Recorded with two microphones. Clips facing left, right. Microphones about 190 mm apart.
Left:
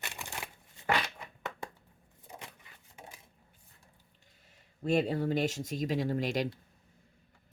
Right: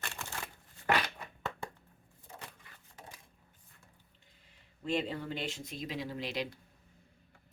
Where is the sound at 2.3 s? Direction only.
15° left (ahead or behind).